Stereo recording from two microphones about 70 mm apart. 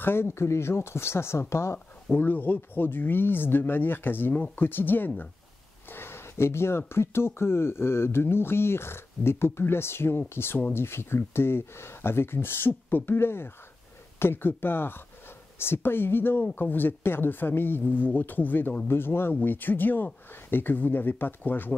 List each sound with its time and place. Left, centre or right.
0.0 s speech: left
2.0 s speech: left
5.9 s a sound: left
6.9 s speech: left